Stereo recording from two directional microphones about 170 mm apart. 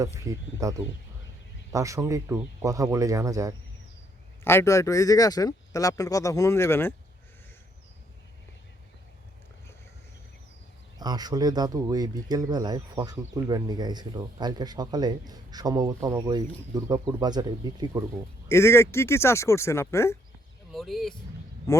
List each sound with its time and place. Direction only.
0.6 s speech: 20° right (ahead or behind)
4.4 s speech: 15° left (ahead or behind)
10.9 s speech: 25° right (ahead or behind)
18.4 s speech: 15° left (ahead or behind)
20.7 s speech: centre (ahead or behind)